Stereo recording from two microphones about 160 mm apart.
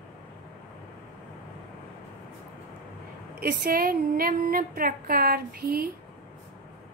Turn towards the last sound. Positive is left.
turn(degrees=-65)  # may be behind; listen again after turning